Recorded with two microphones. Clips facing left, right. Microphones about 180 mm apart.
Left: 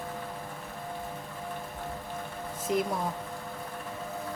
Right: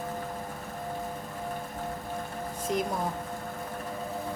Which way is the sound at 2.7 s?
Centre (ahead or behind).